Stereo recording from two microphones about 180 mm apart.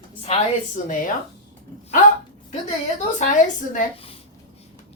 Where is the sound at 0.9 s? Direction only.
45° left (ahead or behind).